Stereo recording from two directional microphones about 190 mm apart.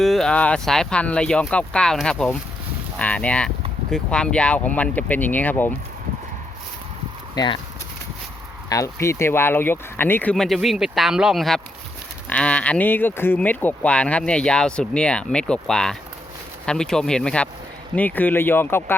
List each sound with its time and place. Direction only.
0.0 s speech: centre (ahead or behind)
7.3 s speech: 25° left (ahead or behind)
8.7 s speech: 15° left (ahead or behind)